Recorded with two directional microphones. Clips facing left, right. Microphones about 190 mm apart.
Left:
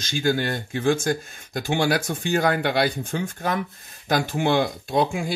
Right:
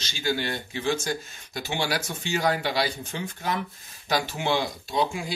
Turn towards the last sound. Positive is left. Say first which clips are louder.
# left 4 dB
turn(degrees=55)  # may be behind; listen again after turning